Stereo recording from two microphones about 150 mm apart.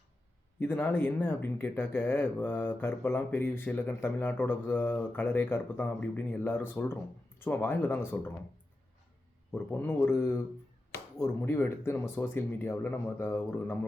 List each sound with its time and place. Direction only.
0.6 s speech: 10° left (ahead or behind)
9.5 s speech: 15° left (ahead or behind)